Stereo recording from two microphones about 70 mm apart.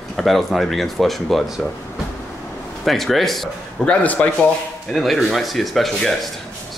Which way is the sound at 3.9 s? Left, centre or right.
Left.